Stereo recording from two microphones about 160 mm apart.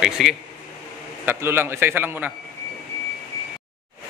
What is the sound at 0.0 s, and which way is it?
Speech, centre (ahead or behind).